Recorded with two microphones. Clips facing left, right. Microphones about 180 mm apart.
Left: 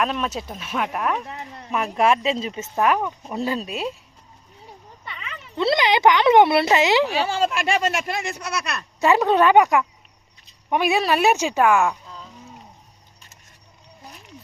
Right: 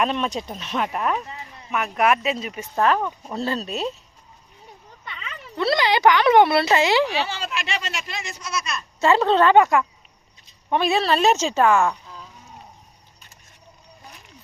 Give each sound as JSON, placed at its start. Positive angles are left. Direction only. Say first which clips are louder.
{"t": 0.0, "sound": "speech", "louder": "right 1 dB", "side_deg": 0}
{"t": 1.3, "sound": "a sound", "louder": "left 3 dB", "side_deg": 60}
{"t": 1.7, "sound": "speech", "louder": "left 1 dB", "side_deg": 30}
{"t": 2.7, "sound": "speech", "louder": "even", "side_deg": 15}
{"t": 5.5, "sound": "speech", "louder": "left 1 dB", "side_deg": 20}
{"t": 7.1, "sound": "speech", "louder": "left 5 dB", "side_deg": 45}
{"t": 9.0, "sound": "speech", "louder": "even", "side_deg": 15}